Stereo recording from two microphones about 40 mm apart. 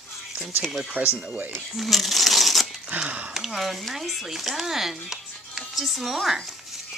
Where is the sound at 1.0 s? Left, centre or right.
Right.